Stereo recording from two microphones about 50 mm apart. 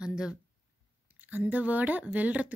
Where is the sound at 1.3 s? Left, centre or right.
Right.